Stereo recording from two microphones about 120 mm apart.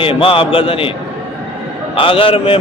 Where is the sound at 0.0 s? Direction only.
50° left (ahead or behind).